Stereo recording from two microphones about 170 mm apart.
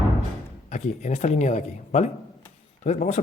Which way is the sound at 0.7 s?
45° left (ahead or behind).